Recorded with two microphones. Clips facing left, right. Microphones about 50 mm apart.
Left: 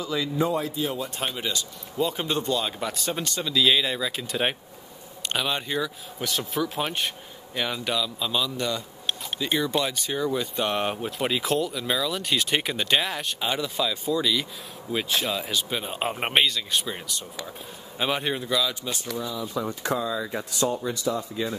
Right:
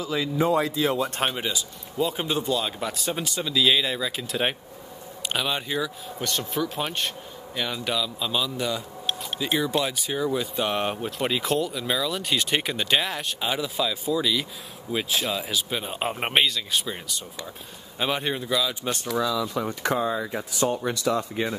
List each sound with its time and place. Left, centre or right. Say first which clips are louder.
0.0 s speech: right 1 dB; centre
0.5 s speech: right 4 dB; right
1.3 s speech: right 1 dB; centre
19.1 s speech: right 9 dB; right
19.5 s speech: right 2 dB; right
20.7 s speech: right 2 dB; right